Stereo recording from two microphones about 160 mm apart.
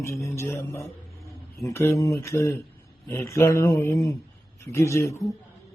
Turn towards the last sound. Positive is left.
turn(degrees=20)  # may be behind; listen again after turning